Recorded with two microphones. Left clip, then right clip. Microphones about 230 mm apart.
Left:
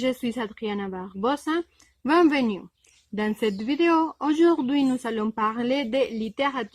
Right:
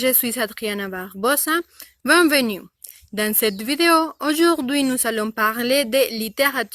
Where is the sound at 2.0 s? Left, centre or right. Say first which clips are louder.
Right 5 dB; centre.